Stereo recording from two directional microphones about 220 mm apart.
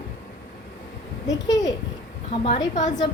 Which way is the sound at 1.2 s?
15° left (ahead or behind).